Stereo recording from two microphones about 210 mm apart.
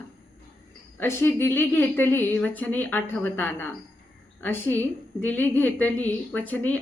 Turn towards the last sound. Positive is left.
turn(degrees=5)  # may be behind; listen again after turning